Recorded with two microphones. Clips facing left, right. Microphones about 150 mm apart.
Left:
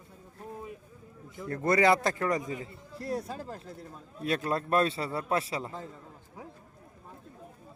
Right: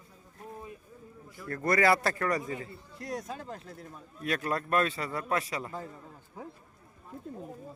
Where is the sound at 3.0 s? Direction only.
30° left (ahead or behind).